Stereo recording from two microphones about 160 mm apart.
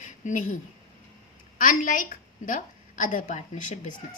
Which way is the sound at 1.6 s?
55° left (ahead or behind).